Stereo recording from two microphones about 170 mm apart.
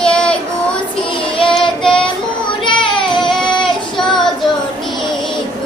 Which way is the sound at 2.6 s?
30° left (ahead or behind).